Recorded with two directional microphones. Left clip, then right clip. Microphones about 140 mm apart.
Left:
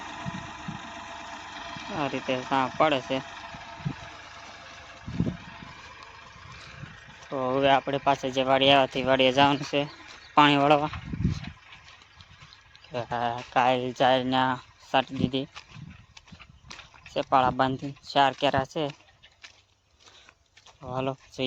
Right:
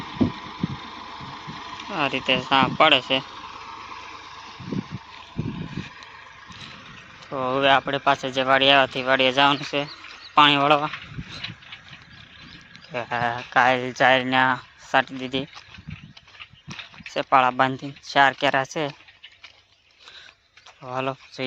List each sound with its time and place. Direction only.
0.0 s vehicle: 5° left (ahead or behind)
3.2 s vehicle: 60° left (ahead or behind)
5.9 s vehicle: 35° right (ahead or behind)
7.4 s speech: 10° left (ahead or behind)
9.0 s speech: 30° left (ahead or behind)
12.9 s speech: 15° left (ahead or behind)
17.3 s speech: 10° left (ahead or behind)
20.9 s speech: 10° left (ahead or behind)
21.4 s speech: 30° left (ahead or behind)